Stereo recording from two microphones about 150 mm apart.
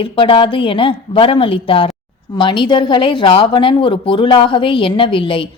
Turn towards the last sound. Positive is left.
turn(degrees=35)  # may be behind; listen again after turning